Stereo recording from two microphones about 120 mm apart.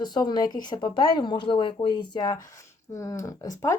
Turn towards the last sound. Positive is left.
turn(degrees=30)  # may be behind; listen again after turning